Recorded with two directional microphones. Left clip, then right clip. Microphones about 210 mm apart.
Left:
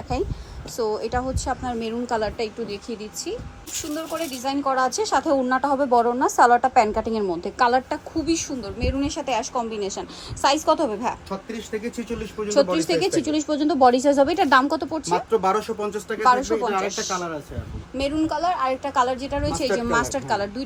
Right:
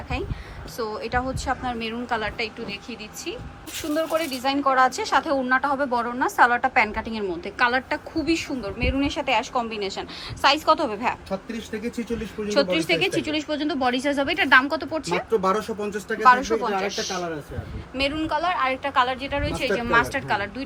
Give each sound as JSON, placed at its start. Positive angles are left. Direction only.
{"t": 0.8, "sound": "a woman's voice", "side_deg": 20}
{"t": 3.9, "sound": "speech", "side_deg": 15}
{"t": 11.3, "sound": "speech", "side_deg": 0}
{"t": 12.9, "sound": "a woman's voice", "side_deg": 25}
{"t": 15.3, "sound": "speech", "side_deg": 0}
{"t": 16.2, "sound": "speech", "side_deg": 15}
{"t": 16.6, "sound": "speech", "side_deg": 0}
{"t": 16.8, "sound": "a woman's voice", "side_deg": 20}